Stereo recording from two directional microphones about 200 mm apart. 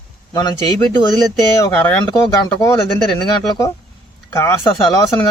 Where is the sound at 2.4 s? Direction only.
15° left (ahead or behind).